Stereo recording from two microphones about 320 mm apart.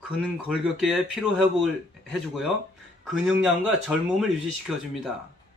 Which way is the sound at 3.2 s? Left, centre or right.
Centre.